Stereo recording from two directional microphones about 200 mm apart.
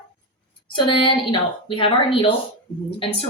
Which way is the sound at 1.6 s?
25° left (ahead or behind).